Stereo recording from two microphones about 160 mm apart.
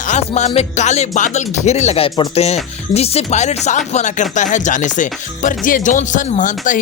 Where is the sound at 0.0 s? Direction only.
50° left (ahead or behind).